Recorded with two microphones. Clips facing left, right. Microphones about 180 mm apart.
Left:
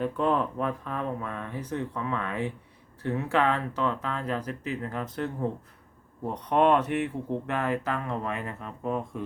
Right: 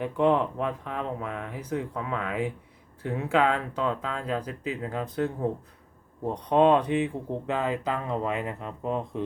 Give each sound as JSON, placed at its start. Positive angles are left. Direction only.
{"t": 0.0, "sound": "speech", "side_deg": -15}